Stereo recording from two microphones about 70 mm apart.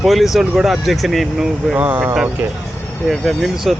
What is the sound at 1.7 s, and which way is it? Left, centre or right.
Speech, right.